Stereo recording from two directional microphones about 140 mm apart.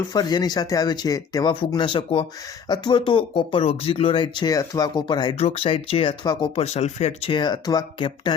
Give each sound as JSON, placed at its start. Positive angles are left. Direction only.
{"t": 0.1, "sound": "speech", "side_deg": 30}
{"t": 5.4, "sound": "speech", "side_deg": 45}
{"t": 6.6, "sound": "speech", "side_deg": 50}
{"t": 7.3, "sound": "speech", "side_deg": 30}